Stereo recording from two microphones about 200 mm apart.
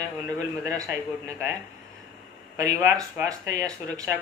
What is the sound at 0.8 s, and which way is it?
Speech, 15° right (ahead or behind).